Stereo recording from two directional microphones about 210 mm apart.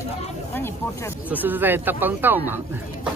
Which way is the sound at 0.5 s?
10° left (ahead or behind).